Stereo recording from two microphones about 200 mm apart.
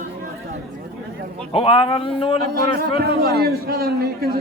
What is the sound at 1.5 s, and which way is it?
Speech, 25° left (ahead or behind).